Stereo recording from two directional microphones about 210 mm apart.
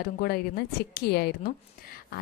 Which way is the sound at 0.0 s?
45° left (ahead or behind).